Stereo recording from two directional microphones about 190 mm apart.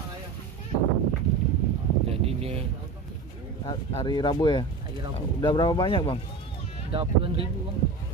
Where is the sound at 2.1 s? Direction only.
30° right (ahead or behind).